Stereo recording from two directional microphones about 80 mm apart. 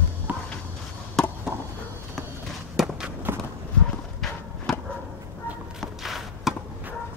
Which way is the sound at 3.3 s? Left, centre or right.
Right.